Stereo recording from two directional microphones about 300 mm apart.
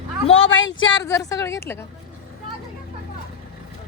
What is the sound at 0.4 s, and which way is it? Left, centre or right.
Speech, left.